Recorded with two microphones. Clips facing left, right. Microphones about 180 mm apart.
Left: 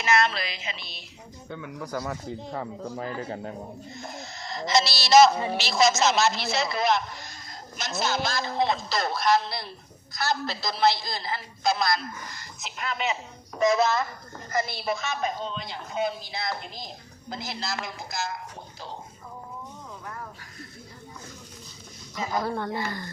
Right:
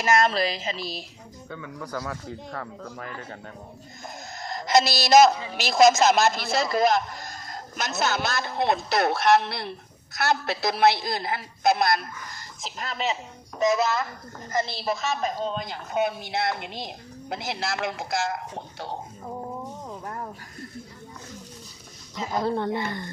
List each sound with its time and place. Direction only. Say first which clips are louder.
0.0 s a woman's voice: right 3 dB; 45° right (ahead or behind)
1.5 s speech: left 1 dB; 15° left (ahead or behind)
3.0 s a man's voice: left 5 dB; 35° left (ahead or behind)
4.4 s a man's voice: right 3 dB; 50° right (ahead or behind)
12.6 s a woman's voice: right 1 dB; 35° right (ahead or behind)
14.5 s a woman's voice: right 1 dB; 25° right (ahead or behind); by 16.0 s 45° right (ahead or behind)
16.0 s a woman's voice: right 4 dB; 70° right (ahead or behind)
19.9 s snake: right 3 dB; 35° right (ahead or behind)
22.4 s speech: right 4 dB; 25° right (ahead or behind)